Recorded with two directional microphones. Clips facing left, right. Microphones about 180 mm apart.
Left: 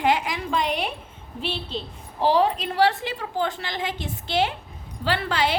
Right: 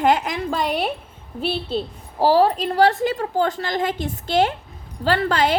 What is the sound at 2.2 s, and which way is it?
A woman's voice, 40° right (ahead or behind).